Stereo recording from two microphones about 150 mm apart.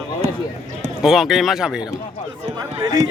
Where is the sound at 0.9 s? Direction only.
5° right (ahead or behind).